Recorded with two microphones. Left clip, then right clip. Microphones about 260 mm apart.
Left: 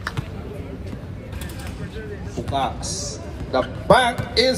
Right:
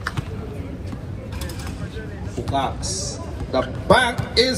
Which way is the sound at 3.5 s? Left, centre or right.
Left.